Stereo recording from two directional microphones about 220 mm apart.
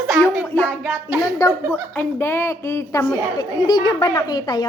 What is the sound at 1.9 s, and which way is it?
A woman's voice, 10° left (ahead or behind).